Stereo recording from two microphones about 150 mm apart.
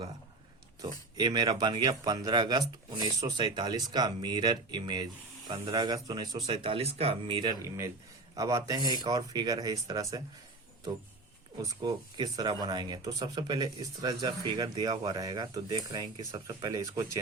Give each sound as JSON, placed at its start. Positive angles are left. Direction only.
{"t": 1.1, "sound": "speech", "side_deg": -25}
{"t": 11.6, "sound": "speech", "side_deg": -30}